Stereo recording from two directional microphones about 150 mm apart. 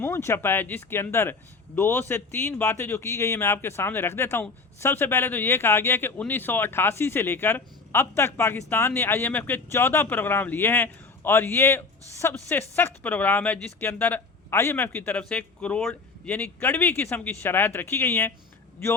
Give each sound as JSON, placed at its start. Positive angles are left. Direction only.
{"t": 0.0, "sound": "speech", "side_deg": 15}